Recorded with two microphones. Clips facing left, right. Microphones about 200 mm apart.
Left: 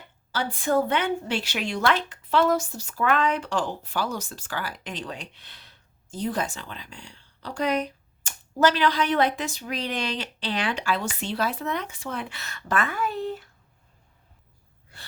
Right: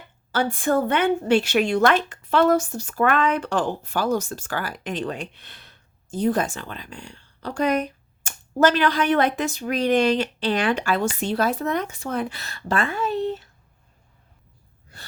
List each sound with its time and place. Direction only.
0.3 s speech: 50° right (ahead or behind); by 13.4 s 20° right (ahead or behind)